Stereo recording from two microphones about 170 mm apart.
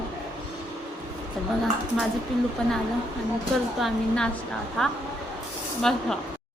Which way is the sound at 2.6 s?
5° left (ahead or behind).